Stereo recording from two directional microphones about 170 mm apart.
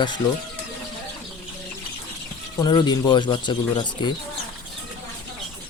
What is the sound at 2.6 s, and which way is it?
Speech, 25° left (ahead or behind).